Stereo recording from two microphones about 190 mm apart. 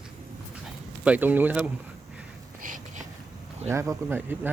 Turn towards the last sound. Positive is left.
turn(degrees=-10)  # may be behind; listen again after turning